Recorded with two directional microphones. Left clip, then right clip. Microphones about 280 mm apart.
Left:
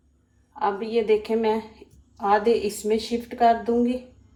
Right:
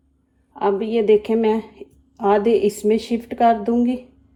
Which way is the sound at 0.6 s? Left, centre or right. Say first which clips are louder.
Right 4 dB; right.